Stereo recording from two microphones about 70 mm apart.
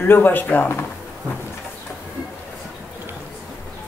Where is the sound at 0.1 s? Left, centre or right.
Left.